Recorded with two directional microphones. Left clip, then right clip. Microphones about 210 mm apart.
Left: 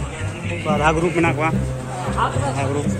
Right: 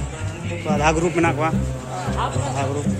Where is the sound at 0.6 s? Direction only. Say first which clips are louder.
Left 1 dB; 30° right (ahead or behind).